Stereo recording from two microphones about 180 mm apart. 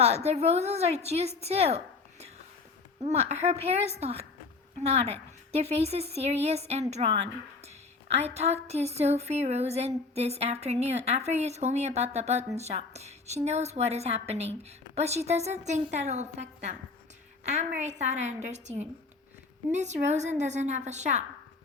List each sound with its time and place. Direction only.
0.0 s a woman's voice: 35° right (ahead or behind)